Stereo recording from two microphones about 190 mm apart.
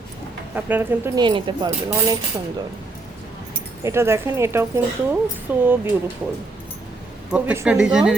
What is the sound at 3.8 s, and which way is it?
Speech, 15° right (ahead or behind).